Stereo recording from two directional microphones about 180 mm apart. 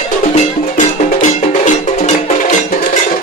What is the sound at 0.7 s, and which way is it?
Music, 40° left (ahead or behind).